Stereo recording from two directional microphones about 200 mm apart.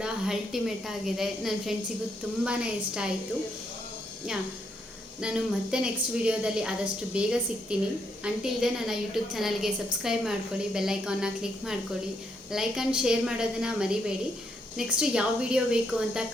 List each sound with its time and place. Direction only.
0.0 s a woman's voice: centre (ahead or behind)
5.2 s a woman's voice: 5° right (ahead or behind)